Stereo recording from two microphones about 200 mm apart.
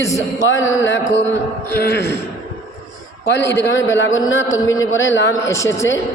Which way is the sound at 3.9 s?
70° left (ahead or behind).